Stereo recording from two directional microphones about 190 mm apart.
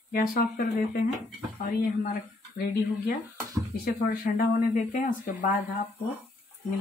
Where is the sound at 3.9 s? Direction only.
45° left (ahead or behind).